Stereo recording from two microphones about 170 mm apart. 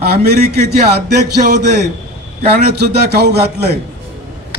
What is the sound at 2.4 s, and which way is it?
A man's voice, 70° right (ahead or behind).